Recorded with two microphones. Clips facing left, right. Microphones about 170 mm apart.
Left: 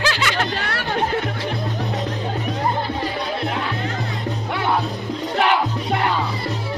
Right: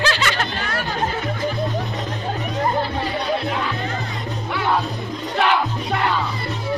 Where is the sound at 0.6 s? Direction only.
70° left (ahead or behind).